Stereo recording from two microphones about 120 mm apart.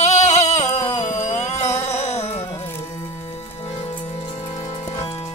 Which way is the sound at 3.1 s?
65° left (ahead or behind).